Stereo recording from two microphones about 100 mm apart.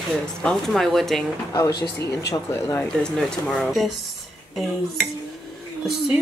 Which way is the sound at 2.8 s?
10° left (ahead or behind).